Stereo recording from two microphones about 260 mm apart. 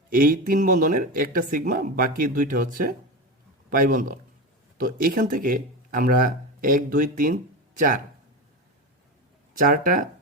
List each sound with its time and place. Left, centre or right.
0.1 s speech: right
9.6 s speech: right